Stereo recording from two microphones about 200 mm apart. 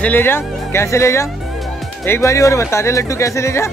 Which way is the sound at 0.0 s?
10° left (ahead or behind).